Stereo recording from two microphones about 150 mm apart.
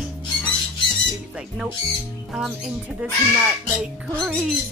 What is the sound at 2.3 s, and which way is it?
Speech, 5° right (ahead or behind).